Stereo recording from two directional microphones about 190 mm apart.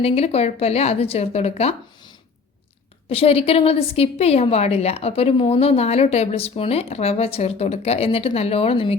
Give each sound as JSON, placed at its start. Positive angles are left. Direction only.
{"t": 0.0, "sound": "a woman's voice", "side_deg": 35}